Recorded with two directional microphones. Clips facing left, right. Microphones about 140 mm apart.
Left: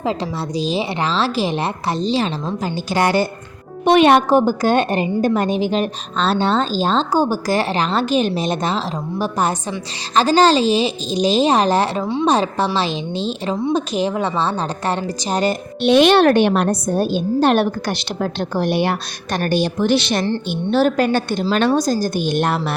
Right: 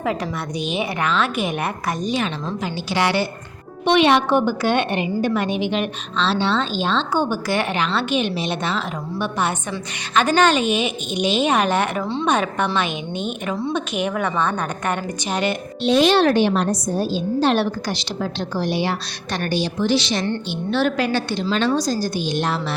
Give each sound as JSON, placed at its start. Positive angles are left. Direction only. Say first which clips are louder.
{"t": 0.0, "sound": "a woman's voice", "louder": "left 2 dB", "side_deg": 25}
{"t": 2.9, "sound": "a woman's voice", "louder": "left 3 dB", "side_deg": 45}
{"t": 13.7, "sound": "a woman's voice", "louder": "left 3 dB", "side_deg": 35}
{"t": 15.8, "sound": "a woman's voice", "louder": "left 4 dB", "side_deg": 70}
{"t": 20.5, "sound": "a woman's voice", "louder": "left 5 dB", "side_deg": 40}